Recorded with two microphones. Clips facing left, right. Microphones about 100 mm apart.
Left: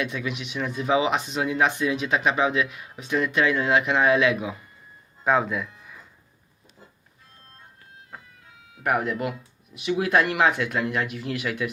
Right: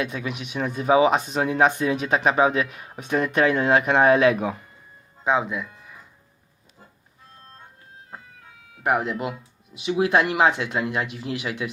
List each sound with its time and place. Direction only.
0.0 s speech: 35° right (ahead or behind)
5.2 s speech: 10° right (ahead or behind)
8.8 s speech: 25° right (ahead or behind)